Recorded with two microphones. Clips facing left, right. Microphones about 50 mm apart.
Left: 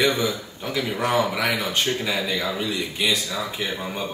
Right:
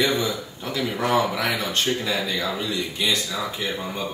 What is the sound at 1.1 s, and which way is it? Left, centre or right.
A man's voice, centre.